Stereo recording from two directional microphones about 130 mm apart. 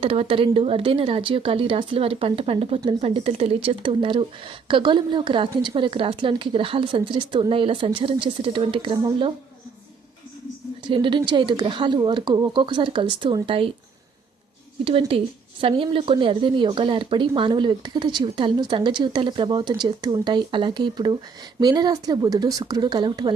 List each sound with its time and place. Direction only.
0.0 s speech: 45° right (ahead or behind)
10.8 s speech: 40° right (ahead or behind)
14.8 s speech: 45° right (ahead or behind)